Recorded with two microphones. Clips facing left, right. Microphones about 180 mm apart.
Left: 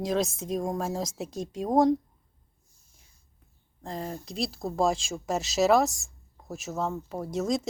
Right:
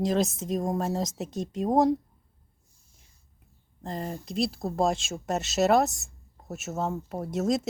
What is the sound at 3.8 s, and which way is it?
Speech, centre (ahead or behind).